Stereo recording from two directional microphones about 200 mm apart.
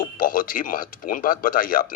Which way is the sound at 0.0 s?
45° left (ahead or behind).